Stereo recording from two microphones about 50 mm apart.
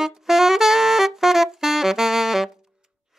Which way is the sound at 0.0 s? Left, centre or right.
Centre.